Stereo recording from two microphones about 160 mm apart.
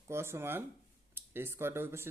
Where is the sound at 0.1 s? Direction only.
15° right (ahead or behind).